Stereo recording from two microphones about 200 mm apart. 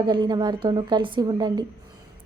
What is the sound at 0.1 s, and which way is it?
A woman's voice, 20° right (ahead or behind).